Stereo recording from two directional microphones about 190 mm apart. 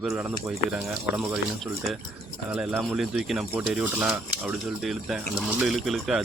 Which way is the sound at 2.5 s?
5° right (ahead or behind).